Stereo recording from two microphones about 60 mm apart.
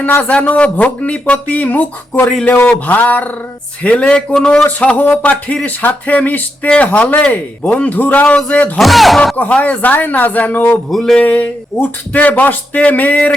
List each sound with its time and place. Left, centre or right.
0.2 s music: left
4.4 s a man's voice: centre
4.6 s music: left
8.8 s speech: centre
9.4 s music: left
10.9 s a man's voice: centre
11.2 s music: left